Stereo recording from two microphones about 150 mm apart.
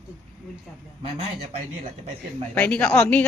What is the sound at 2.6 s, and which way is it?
Speech, 10° left (ahead or behind).